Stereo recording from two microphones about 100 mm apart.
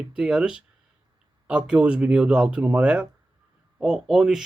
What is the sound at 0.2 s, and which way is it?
Speech, 10° right (ahead or behind).